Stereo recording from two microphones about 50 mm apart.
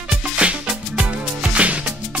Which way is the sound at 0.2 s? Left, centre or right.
Right.